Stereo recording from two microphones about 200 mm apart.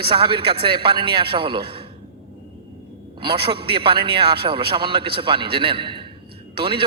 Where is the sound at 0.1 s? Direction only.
25° right (ahead or behind).